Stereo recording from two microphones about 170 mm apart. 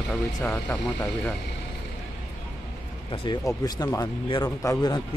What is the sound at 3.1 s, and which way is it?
Speech, 25° left (ahead or behind).